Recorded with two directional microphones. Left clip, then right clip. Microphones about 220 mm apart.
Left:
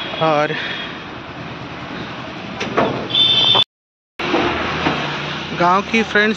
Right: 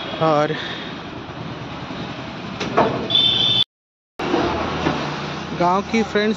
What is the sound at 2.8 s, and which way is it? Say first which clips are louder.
Vehicle: even; 50° right (ahead or behind).